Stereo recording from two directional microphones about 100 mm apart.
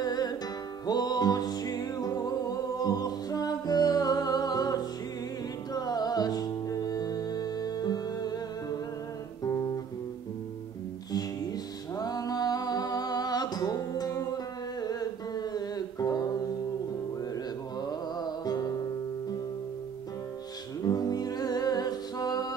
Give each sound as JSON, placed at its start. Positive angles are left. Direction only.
{"t": 0.0, "sound": "music", "side_deg": 40}
{"t": 9.4, "sound": "guitar", "side_deg": 30}
{"t": 11.1, "sound": "music", "side_deg": 40}
{"t": 17.7, "sound": "music", "side_deg": 40}
{"t": 20.8, "sound": "music", "side_deg": 40}